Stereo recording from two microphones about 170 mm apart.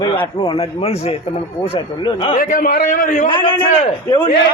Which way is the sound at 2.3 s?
60° left (ahead or behind).